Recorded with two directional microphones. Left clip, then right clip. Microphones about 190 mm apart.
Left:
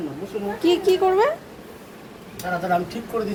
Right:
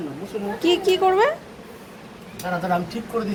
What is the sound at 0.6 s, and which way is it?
Speech, 15° left (ahead or behind).